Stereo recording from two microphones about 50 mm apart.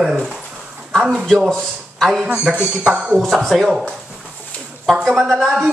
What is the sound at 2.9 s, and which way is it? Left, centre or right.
Speech, right.